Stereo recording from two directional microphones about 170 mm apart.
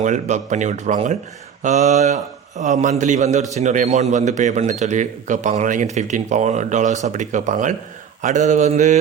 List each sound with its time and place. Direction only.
0.0 s speech: 45° right (ahead or behind)